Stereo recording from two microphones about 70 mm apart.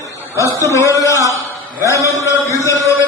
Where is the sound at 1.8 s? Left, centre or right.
Left.